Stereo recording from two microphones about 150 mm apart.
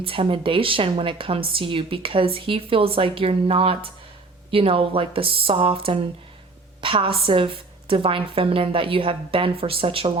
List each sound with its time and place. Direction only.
0.0 s speech: 35° right (ahead or behind)